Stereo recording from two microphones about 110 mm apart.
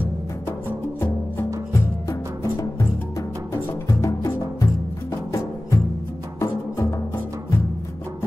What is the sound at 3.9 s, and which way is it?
Music, 25° left (ahead or behind).